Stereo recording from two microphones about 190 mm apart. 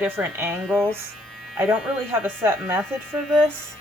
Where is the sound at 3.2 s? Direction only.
Centre (ahead or behind).